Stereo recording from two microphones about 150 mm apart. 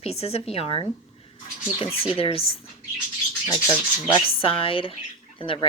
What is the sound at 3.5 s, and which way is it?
Speech, 30° left (ahead or behind).